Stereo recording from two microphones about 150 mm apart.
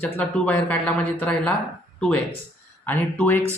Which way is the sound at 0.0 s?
10° left (ahead or behind).